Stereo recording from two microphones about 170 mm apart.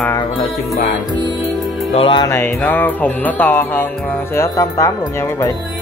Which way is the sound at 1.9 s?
30° left (ahead or behind).